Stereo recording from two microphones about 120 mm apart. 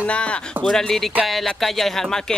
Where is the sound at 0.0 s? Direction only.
10° left (ahead or behind).